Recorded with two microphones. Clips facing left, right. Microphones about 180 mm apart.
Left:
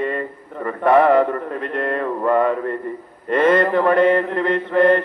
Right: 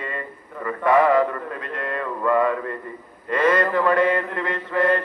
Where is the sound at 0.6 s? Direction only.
40° left (ahead or behind).